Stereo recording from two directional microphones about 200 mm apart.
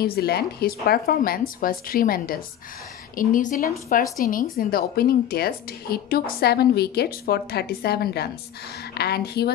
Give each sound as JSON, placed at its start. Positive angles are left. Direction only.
{"t": 0.0, "sound": "a woman's voice", "side_deg": 50}